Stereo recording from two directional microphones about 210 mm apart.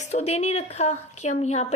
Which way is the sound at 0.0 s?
30° left (ahead or behind).